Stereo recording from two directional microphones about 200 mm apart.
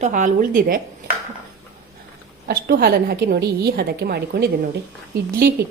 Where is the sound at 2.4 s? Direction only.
50° right (ahead or behind).